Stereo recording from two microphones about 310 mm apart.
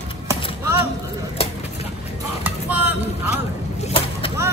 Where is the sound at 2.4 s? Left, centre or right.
Centre.